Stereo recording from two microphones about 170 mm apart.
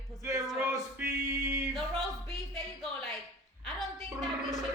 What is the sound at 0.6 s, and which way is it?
Male singing, 20° right (ahead or behind).